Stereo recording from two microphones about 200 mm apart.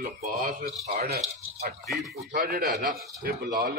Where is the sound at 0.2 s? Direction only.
45° right (ahead or behind).